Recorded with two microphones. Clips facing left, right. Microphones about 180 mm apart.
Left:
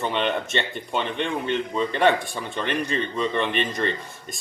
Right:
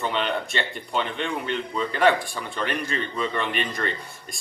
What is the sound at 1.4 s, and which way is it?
Speech, 20° left (ahead or behind).